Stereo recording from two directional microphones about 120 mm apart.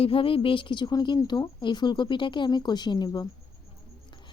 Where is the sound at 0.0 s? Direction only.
50° left (ahead or behind).